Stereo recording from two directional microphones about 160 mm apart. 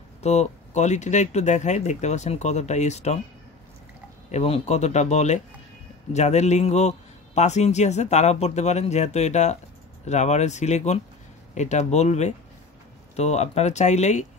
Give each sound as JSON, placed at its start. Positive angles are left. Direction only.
{"t": 0.2, "sound": "a man's voice", "side_deg": 45}
{"t": 4.3, "sound": "a man's voice", "side_deg": 45}